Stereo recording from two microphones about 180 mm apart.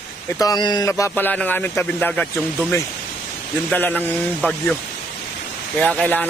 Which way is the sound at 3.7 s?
10° left (ahead or behind).